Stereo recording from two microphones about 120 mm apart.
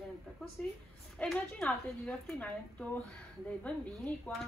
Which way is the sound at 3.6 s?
10° left (ahead or behind).